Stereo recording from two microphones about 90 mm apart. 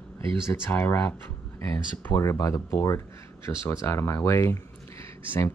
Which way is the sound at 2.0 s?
25° left (ahead or behind).